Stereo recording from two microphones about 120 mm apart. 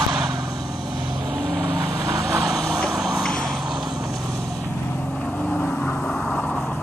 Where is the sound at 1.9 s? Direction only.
30° right (ahead or behind).